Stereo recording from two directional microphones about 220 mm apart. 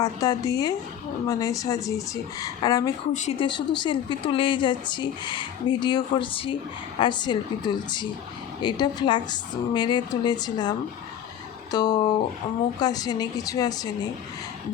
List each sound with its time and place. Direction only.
0.0 s a woman's voice: 15° left (ahead or behind)
3.1 s a woman's voice: 30° left (ahead or behind); by 13.9 s 15° left (ahead or behind)